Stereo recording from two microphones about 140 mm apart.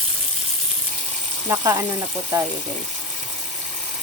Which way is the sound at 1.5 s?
20° right (ahead or behind).